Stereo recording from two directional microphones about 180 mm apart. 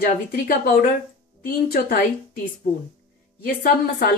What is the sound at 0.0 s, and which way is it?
A woman's voice, 55° left (ahead or behind).